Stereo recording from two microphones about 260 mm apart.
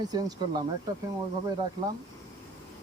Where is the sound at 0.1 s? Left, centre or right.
Centre.